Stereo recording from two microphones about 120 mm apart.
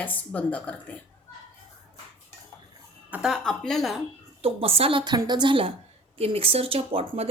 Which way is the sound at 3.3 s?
5° left (ahead or behind).